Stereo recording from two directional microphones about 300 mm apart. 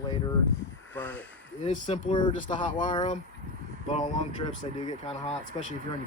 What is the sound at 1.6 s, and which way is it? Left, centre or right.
Speech, centre.